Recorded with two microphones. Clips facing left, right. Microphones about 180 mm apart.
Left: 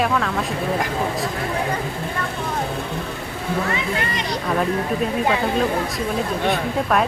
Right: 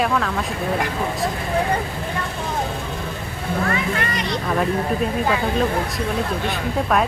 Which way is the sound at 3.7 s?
20° left (ahead or behind).